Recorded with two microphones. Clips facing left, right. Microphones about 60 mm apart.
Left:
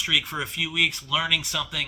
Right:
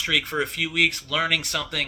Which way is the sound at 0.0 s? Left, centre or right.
Right.